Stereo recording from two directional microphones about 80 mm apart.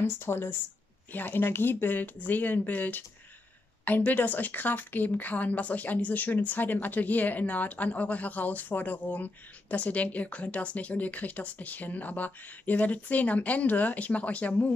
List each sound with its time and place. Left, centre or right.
0.0 s a woman's voice: left